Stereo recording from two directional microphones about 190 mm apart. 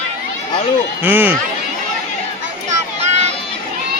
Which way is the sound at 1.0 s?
10° right (ahead or behind).